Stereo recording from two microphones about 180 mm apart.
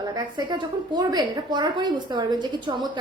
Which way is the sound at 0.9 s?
25° right (ahead or behind).